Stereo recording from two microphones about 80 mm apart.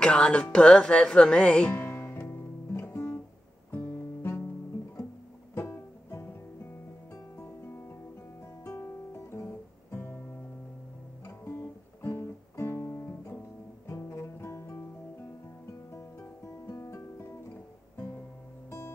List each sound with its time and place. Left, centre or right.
0.0 s speech: centre
1.7 s music: left
5.6 s guitar: left
7.6 s music: left
9.3 s guitar: left
9.8 s music: left
11.2 s guitar: left
12.1 s music: left
15.9 s music: left